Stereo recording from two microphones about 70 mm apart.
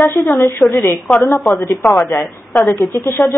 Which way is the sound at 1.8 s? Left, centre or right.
Left.